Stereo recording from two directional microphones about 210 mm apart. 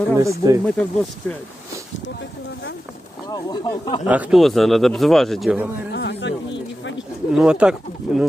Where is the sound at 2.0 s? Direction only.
55° left (ahead or behind).